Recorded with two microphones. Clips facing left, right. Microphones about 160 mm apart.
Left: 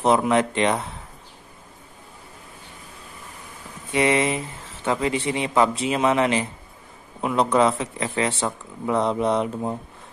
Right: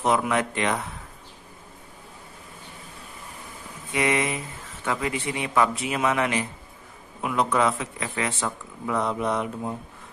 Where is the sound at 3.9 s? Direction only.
25° left (ahead or behind).